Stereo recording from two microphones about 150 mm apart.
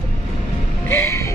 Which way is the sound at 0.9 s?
20° left (ahead or behind).